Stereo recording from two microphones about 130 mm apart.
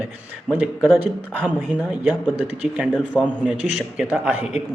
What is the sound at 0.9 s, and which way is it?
Speech, 15° right (ahead or behind).